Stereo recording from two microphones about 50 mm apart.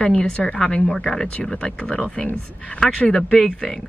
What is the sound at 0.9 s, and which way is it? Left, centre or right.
A woman's voice, centre.